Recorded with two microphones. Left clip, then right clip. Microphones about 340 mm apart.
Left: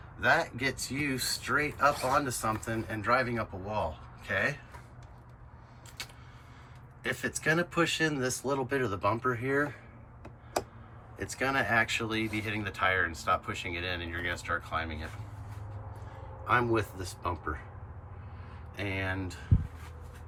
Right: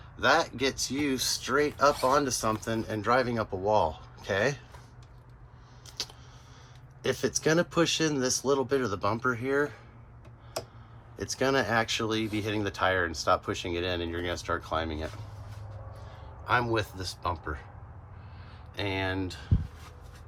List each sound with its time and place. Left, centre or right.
0.2 s speech: centre
7.0 s speech: centre
11.2 s speech: centre
16.0 s speech: centre
18.8 s speech: centre